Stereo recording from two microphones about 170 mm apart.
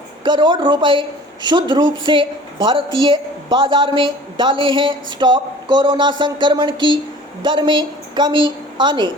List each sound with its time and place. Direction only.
0.3 s a woman's voice: 25° right (ahead or behind)